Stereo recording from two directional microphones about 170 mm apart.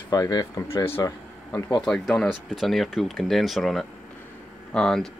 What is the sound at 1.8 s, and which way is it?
Speech, 5° left (ahead or behind).